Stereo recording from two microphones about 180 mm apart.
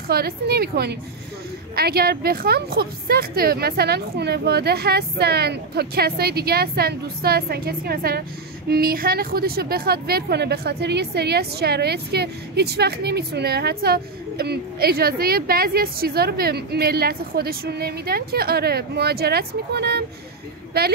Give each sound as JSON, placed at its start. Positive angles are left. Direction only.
{"t": 0.1, "sound": "a woman's voice", "side_deg": -60}